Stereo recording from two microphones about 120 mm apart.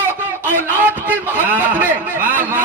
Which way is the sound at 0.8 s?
15° right (ahead or behind).